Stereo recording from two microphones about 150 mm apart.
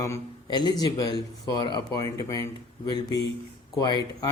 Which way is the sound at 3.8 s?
25° left (ahead or behind).